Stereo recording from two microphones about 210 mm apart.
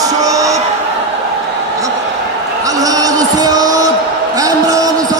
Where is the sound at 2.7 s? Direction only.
15° right (ahead or behind).